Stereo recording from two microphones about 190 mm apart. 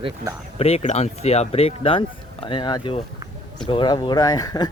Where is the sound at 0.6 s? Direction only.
35° left (ahead or behind).